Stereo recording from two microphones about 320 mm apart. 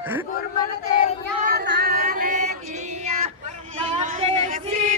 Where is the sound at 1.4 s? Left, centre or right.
Right.